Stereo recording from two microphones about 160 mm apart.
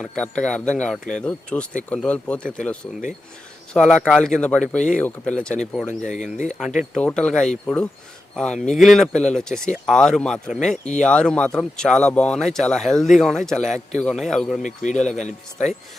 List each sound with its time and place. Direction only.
0.0 s speech: 5° left (ahead or behind)
5.9 s speech: 50° left (ahead or behind)
6.7 s speech: 5° left (ahead or behind)
14.6 s speech: 50° left (ahead or behind)